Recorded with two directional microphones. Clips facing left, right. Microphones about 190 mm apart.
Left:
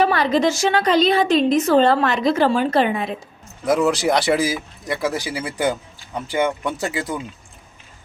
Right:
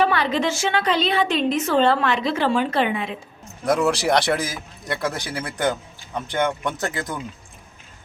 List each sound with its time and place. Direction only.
0.0 s a woman's voice: 40° left (ahead or behind)
3.7 s speech: centre (ahead or behind)